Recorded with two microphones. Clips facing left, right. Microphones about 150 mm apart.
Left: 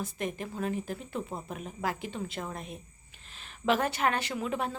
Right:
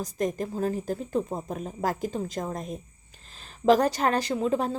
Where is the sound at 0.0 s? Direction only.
40° right (ahead or behind).